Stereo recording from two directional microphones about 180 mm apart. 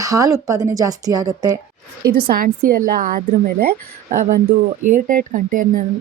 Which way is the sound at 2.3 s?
55° right (ahead or behind).